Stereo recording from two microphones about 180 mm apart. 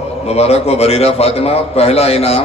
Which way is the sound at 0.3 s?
35° left (ahead or behind).